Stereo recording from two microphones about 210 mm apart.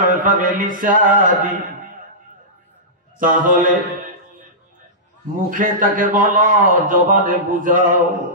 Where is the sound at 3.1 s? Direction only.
40° right (ahead or behind).